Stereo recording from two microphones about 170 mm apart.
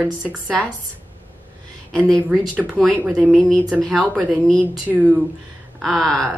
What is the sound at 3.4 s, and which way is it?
Speech, 5° left (ahead or behind).